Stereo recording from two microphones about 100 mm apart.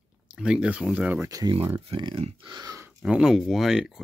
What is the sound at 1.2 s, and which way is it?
Speech, 35° right (ahead or behind).